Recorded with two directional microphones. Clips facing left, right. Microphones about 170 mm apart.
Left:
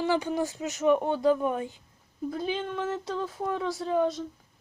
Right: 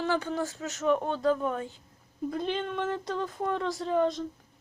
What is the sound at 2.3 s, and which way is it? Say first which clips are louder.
Speech: even; 5° left (ahead or behind).